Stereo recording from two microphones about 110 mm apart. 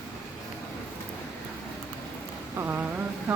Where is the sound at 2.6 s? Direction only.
20° right (ahead or behind).